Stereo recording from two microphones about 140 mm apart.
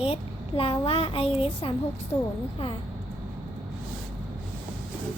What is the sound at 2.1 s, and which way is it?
Speech, 30° left (ahead or behind).